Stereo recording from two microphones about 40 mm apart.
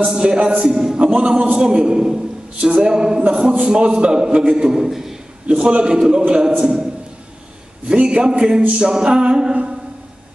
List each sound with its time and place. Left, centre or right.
0.0 s a man's voice: right
0.9 s a man's voice: right
7.9 s a man's voice: right